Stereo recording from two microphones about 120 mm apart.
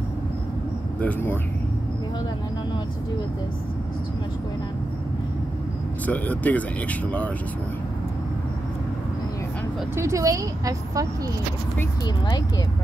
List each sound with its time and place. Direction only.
1.0 s speech: 15° left (ahead or behind)
6.0 s speech: 15° left (ahead or behind)
9.9 s a woman's voice: 25° right (ahead or behind)